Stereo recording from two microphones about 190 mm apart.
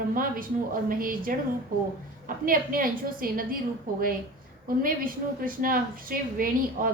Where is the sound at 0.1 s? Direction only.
50° right (ahead or behind).